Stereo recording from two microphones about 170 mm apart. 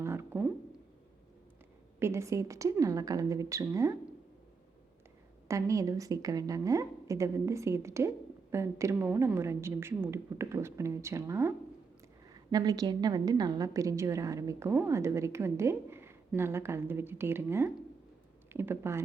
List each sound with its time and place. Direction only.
0.0 s a sound: 15° right (ahead or behind)
2.0 s a woman's voice: 15° right (ahead or behind)
5.5 s a woman's voice: 20° right (ahead or behind)